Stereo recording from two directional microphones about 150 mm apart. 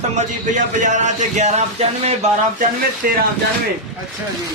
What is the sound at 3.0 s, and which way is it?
Speech, 80° right.